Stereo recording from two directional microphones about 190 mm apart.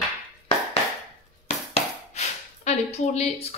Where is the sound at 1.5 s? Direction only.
35° left (ahead or behind).